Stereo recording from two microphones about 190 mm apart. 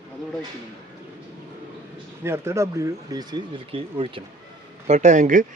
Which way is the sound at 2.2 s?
15° right (ahead or behind).